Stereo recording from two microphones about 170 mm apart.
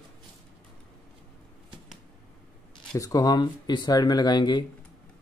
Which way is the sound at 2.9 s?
20° left (ahead or behind).